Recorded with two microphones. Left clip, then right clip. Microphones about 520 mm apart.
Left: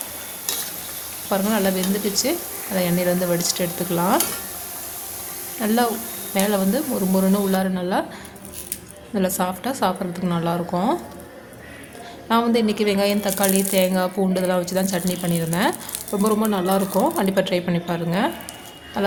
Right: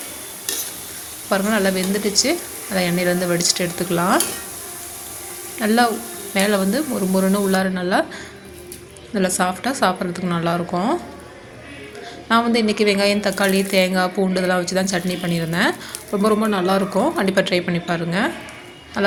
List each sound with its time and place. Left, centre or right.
1.3 s a woman's voice: left
5.5 s a woman's voice: left
9.1 s a woman's voice: left
12.3 s a woman's voice: left